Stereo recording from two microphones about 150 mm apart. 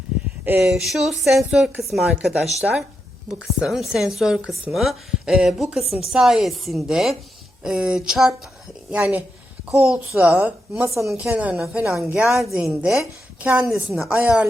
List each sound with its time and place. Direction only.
0.6 s a woman's voice: centre (ahead or behind); by 11.1 s 20° right (ahead or behind)
11.1 s a woman's voice: 5° right (ahead or behind)